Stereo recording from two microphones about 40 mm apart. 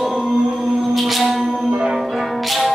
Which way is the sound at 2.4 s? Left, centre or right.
Centre.